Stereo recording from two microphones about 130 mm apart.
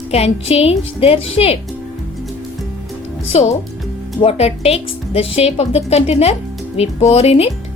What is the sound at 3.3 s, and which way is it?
Speech, 55° left (ahead or behind).